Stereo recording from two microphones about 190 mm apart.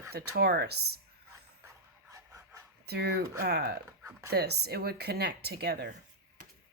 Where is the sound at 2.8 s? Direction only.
60° right (ahead or behind).